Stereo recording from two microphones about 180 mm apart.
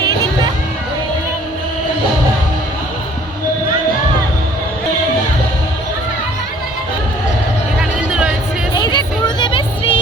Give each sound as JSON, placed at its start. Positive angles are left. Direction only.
{"t": 7.8, "sound": "vehicle", "side_deg": -5}
{"t": 8.7, "sound": "music", "side_deg": 25}